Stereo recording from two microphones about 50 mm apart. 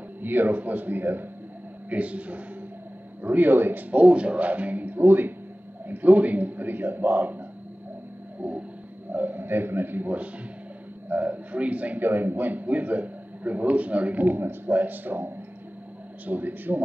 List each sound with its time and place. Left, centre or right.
0.2 s a man's voice: right
1.9 s a man's voice: right
3.9 s a man's voice: right
8.4 s a man's voice: right